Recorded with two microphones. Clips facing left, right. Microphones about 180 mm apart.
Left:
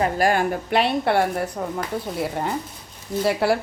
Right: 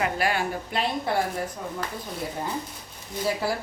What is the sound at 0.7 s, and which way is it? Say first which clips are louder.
Speech: left 8 dB; 70° left (ahead or behind).